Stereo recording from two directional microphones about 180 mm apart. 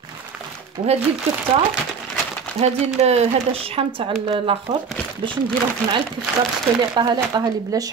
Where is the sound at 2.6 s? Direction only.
35° right (ahead or behind).